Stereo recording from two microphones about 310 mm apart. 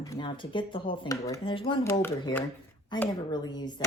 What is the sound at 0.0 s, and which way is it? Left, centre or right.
Speech, centre.